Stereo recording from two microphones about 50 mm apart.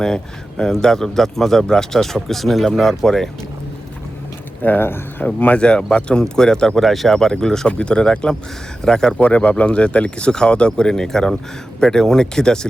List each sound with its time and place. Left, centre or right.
0.6 s speech: centre
4.8 s speech: left
5.2 s speech: left
5.5 s speech: centre
6.8 s speech: centre
7.7 s speech: left
9.1 s speech: left